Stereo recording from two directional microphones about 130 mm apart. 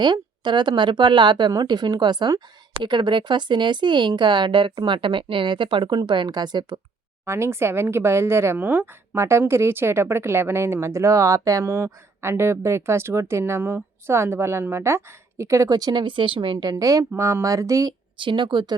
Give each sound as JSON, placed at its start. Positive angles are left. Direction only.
{"t": 0.0, "sound": "speech", "side_deg": -35}
{"t": 7.3, "sound": "speech", "side_deg": -20}
{"t": 18.2, "sound": "speech", "side_deg": -40}